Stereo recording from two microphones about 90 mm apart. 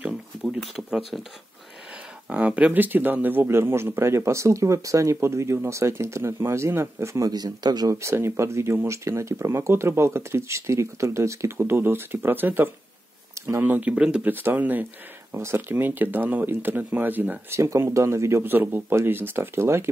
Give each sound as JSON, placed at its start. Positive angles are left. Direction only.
{"t": 0.0, "sound": "a sound", "side_deg": -10}
{"t": 2.2, "sound": "speech", "side_deg": -15}
{"t": 7.2, "sound": "speech", "side_deg": -50}
{"t": 7.9, "sound": "speech", "side_deg": -30}
{"t": 13.3, "sound": "a sound", "side_deg": -30}
{"t": 13.7, "sound": "speech", "side_deg": -15}
{"t": 14.3, "sound": "speech", "side_deg": -20}